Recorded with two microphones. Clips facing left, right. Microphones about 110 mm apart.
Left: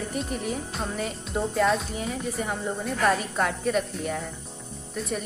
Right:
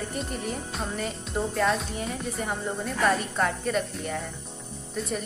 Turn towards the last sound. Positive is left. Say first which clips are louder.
# even
turn(degrees=0)  # may be behind; listen again after turning